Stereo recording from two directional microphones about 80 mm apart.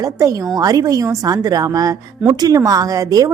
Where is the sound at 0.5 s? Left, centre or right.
Right.